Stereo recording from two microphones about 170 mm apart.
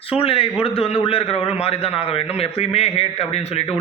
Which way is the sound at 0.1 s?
35° left (ahead or behind).